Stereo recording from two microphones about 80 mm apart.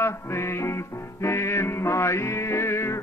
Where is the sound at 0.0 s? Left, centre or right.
Left.